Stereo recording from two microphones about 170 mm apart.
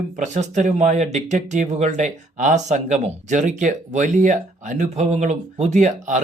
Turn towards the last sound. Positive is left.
turn(degrees=-45)  # may be behind; listen again after turning